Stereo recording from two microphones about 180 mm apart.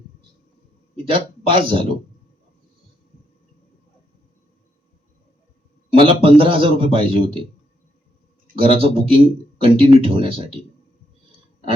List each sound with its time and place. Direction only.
1.1 s speech: 30° right (ahead or behind)
5.9 s speech: 30° right (ahead or behind)
8.6 s speech: 30° right (ahead or behind)